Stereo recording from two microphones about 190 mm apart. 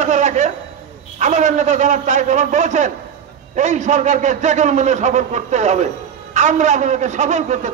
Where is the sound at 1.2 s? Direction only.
40° right (ahead or behind).